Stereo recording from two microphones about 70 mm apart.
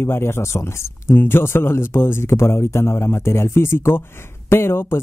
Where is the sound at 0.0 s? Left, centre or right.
Left.